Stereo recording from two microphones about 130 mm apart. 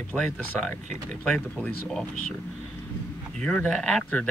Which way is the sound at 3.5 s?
10° left (ahead or behind).